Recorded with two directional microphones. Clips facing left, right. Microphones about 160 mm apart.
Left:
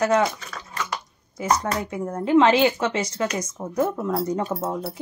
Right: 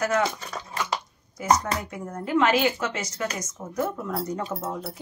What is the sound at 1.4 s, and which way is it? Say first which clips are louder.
A woman's voice: even; 30° left (ahead or behind).